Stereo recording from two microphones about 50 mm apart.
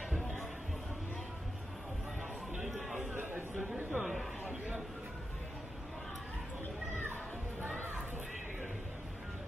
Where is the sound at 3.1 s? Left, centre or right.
Right.